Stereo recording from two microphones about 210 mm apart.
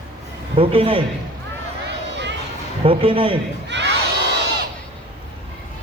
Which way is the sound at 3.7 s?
55° right (ahead or behind).